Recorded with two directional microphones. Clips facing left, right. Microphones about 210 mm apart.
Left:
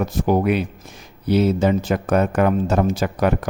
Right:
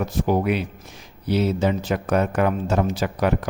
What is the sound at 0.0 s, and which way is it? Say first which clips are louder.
Speech: left 3 dB; 45° left (ahead or behind).